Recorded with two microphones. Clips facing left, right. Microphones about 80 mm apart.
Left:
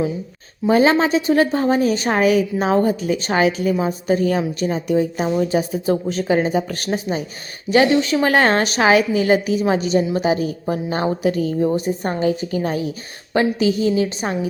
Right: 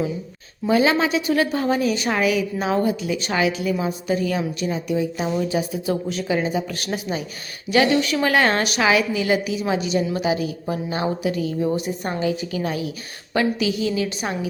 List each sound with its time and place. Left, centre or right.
0.7 s a woman's voice: left